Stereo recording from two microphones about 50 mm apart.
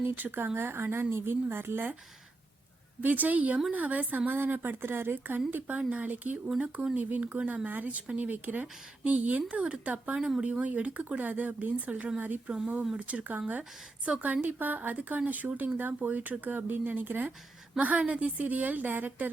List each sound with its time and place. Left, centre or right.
0.0 s speech: right
3.0 s speech: right
4.3 s speech: right
10.2 s speech: centre
10.4 s speech: right